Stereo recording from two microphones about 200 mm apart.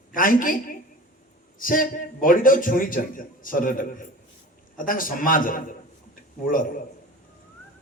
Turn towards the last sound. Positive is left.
turn(degrees=45)  # may be behind; listen again after turning